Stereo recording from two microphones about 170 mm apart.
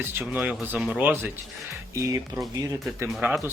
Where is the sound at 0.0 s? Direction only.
10° right (ahead or behind).